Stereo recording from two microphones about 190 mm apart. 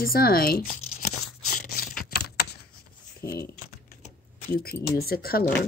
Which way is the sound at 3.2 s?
55° left (ahead or behind).